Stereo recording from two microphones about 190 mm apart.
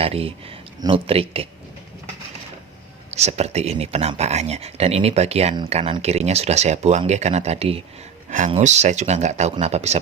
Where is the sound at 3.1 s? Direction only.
35° right (ahead or behind).